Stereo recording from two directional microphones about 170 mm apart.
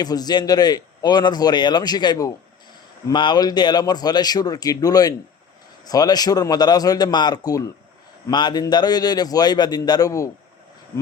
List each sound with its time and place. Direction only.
0.0 s a man's voice: 25° left (ahead or behind)